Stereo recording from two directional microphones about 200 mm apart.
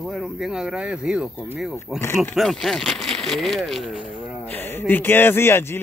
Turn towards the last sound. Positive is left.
turn(degrees=10)  # may be behind; listen again after turning